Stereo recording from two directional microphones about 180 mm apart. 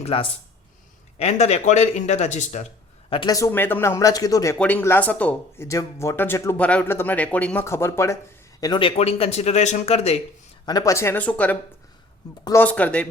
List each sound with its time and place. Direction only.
0.0 s speech: 30° left (ahead or behind)
3.1 s speech: 25° left (ahead or behind)
4.5 s speech: 10° left (ahead or behind)
8.6 s speech: 25° left (ahead or behind)
10.7 s speech: 20° left (ahead or behind)